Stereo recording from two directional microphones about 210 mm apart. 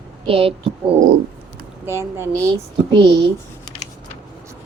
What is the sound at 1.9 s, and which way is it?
Speech, 10° right (ahead or behind).